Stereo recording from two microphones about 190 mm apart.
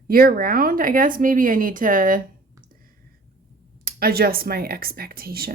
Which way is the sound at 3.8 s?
50° right (ahead or behind).